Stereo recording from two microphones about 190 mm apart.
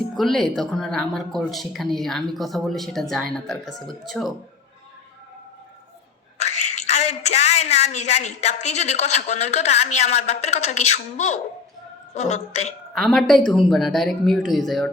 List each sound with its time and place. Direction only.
0.1 s a woman's voice: centre (ahead or behind)
6.4 s a woman's voice: 35° left (ahead or behind)
12.9 s a woman's voice: centre (ahead or behind)